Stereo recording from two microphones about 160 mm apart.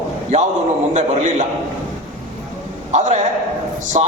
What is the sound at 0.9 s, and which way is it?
Speech, 45° right (ahead or behind).